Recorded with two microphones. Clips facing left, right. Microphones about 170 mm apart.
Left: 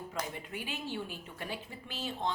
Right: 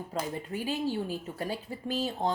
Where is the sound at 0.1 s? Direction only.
40° right (ahead or behind).